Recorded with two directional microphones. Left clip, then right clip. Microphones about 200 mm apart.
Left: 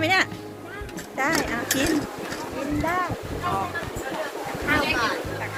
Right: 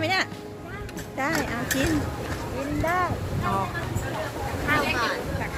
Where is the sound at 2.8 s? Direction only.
55° right (ahead or behind).